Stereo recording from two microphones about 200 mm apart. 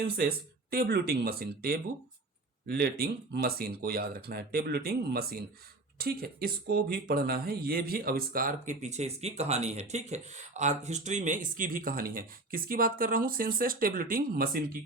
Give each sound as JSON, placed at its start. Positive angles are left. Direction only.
{"t": 0.2, "sound": "speech", "side_deg": -50}